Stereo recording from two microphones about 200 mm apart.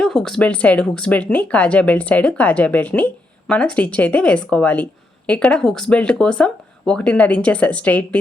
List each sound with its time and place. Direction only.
0.0 s speech: 5° left (ahead or behind)